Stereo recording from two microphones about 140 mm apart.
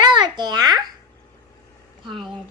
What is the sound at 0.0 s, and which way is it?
Babbling, 30° right (ahead or behind).